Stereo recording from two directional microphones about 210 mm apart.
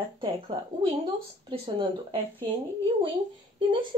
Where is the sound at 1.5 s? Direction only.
25° right (ahead or behind).